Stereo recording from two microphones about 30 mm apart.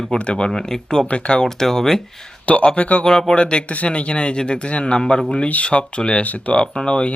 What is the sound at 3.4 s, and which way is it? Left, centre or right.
Speech, left.